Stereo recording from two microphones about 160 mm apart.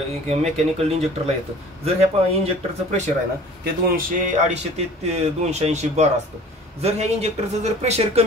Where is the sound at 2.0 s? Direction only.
40° right (ahead or behind).